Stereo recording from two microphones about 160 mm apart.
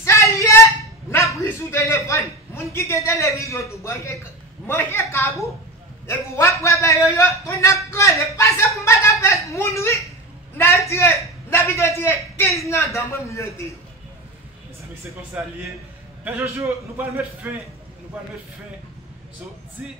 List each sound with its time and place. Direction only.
0.0 s a sound: 20° left (ahead or behind)
1.1 s a man's voice: 15° left (ahead or behind)
15.4 s a man's voice: 10° right (ahead or behind)
19.8 s a man's voice: 10° right (ahead or behind)